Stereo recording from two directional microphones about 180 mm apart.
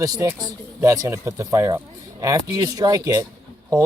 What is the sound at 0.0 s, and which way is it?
Speech, 15° right (ahead or behind).